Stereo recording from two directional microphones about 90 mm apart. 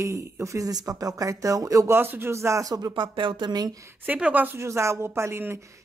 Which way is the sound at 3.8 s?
30° right (ahead or behind).